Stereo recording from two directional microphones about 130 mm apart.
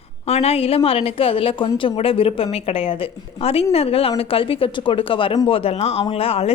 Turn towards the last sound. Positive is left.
turn(degrees=50)  # may be behind; listen again after turning